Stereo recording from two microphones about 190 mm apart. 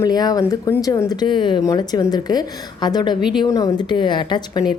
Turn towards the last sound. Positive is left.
turn(degrees=25)  # may be behind; listen again after turning